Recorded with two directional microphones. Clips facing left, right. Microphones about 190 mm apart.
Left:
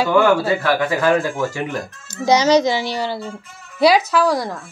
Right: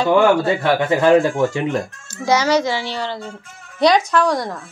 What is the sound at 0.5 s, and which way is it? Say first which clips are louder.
Speech: right 1 dB; 25° right (ahead or behind).